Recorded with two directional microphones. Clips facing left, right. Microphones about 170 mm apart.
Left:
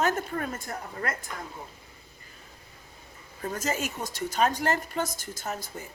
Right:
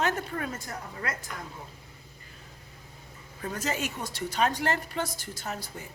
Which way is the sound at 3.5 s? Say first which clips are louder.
Left 1 dB; 45° left (ahead or behind).